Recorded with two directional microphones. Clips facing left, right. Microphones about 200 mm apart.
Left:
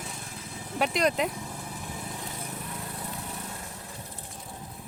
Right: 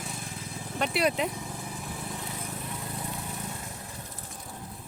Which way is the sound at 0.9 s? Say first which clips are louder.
Even; 5° right (ahead or behind).